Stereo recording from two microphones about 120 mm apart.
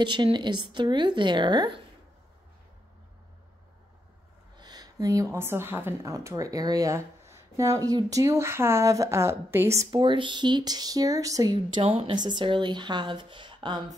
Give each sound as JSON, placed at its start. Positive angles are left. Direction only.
{"t": 0.0, "sound": "a woman's voice", "side_deg": -40}
{"t": 4.6, "sound": "a woman's voice", "side_deg": -35}
{"t": 9.8, "sound": "a woman's voice", "side_deg": -40}
{"t": 11.7, "sound": "a woman's voice", "side_deg": -50}